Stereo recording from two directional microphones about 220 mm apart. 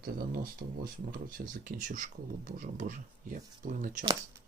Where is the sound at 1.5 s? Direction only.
40° right (ahead or behind).